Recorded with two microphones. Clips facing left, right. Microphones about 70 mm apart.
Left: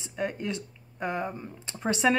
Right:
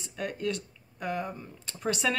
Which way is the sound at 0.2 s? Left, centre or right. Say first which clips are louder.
Left 1 dB; left.